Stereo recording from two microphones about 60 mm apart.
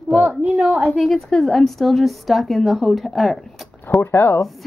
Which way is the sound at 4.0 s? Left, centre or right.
Left.